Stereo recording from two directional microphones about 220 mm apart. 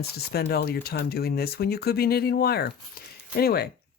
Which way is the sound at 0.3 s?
45° left (ahead or behind).